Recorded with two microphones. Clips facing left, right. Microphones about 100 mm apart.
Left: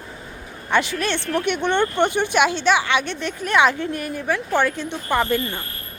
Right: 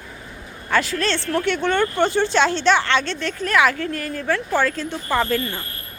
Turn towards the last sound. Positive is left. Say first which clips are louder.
# even
turn(degrees=15)  # may be behind; listen again after turning